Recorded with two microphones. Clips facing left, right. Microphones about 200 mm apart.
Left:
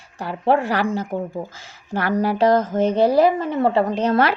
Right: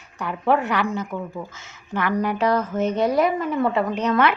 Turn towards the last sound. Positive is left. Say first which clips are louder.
# left 2 dB
turn(degrees=35)  # may be behind; listen again after turning